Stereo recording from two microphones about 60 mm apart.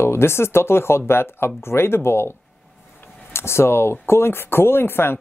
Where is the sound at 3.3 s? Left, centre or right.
Left.